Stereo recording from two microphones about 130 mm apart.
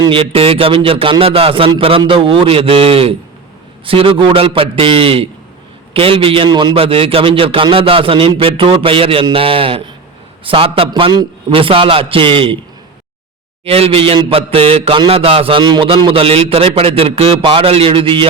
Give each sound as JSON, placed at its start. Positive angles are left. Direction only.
{"t": 0.0, "sound": "a man's voice", "side_deg": -45}
{"t": 6.7, "sound": "a man's voice", "side_deg": -45}
{"t": 13.7, "sound": "a man's voice", "side_deg": -50}